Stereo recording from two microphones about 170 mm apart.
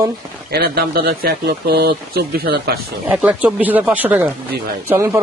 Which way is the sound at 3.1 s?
5° right (ahead or behind).